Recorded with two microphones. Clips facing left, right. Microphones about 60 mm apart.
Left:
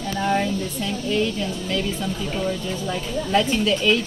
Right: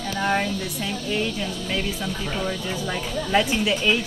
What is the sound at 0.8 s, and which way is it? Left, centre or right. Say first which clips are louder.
Speech: left 3 dB; centre.